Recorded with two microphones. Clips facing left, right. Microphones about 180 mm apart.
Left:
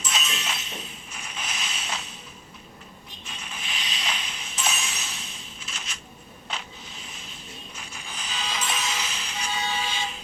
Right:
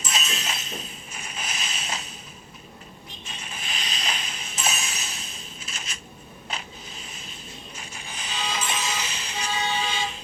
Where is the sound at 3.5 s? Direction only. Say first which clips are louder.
Right 1 dB; 45° right (ahead or behind).